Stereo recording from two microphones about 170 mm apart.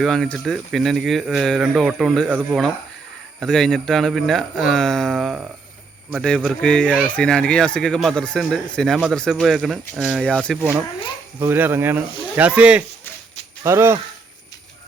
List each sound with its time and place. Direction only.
0.0 s speech: 5° left (ahead or behind)
3.4 s speech: 5° left (ahead or behind)
11.3 s speech: 10° right (ahead or behind)